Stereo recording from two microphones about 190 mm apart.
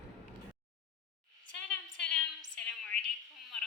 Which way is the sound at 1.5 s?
70° left (ahead or behind).